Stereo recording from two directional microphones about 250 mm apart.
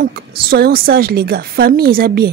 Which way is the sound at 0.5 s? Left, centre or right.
Right.